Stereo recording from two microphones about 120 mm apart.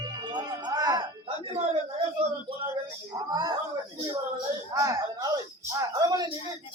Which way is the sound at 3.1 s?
35° right (ahead or behind).